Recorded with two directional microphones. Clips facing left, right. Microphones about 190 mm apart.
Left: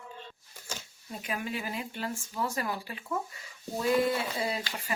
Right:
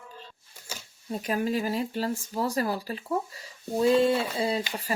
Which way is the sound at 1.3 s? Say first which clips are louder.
Right 8 dB; 40° right (ahead or behind).